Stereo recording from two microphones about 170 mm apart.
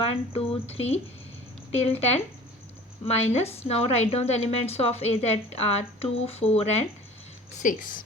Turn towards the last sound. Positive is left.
turn(degrees=50)  # may be behind; listen again after turning